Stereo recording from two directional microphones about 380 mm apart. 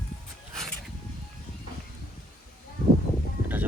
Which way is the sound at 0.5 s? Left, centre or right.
Centre.